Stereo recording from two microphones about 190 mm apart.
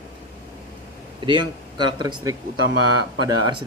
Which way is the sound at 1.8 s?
25° right (ahead or behind).